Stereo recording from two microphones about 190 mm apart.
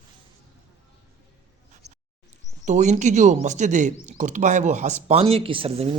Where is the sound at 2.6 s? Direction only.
40° right (ahead or behind).